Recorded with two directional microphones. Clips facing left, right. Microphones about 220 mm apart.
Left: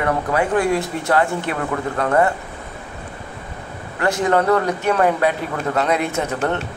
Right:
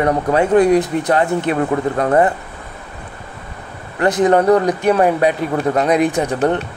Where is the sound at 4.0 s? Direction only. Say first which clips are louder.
Right 5 dB; 20° right (ahead or behind).